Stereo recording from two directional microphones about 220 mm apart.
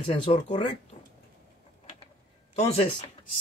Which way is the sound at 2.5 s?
25° left (ahead or behind).